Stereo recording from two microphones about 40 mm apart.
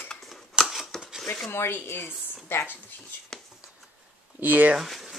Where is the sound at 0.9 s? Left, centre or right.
Centre.